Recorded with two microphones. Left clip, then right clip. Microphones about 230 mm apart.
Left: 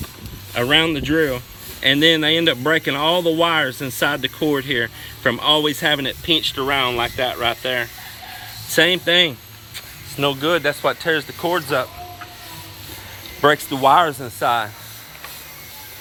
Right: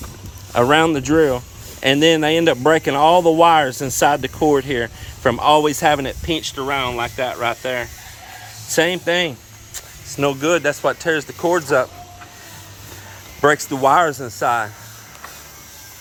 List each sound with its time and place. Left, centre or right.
0.5 s speech: centre
13.4 s speech: centre